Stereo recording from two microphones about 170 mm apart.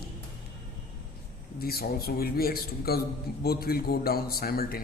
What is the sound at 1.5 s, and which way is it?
Speech, 65° left (ahead or behind).